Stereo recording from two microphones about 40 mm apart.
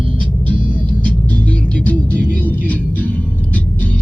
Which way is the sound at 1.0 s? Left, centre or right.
Left.